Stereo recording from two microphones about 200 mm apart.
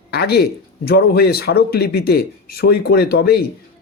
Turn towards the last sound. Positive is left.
turn(degrees=55)  # may be behind; listen again after turning